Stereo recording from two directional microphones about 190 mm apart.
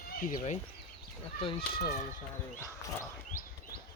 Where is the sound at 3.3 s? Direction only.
45° left (ahead or behind).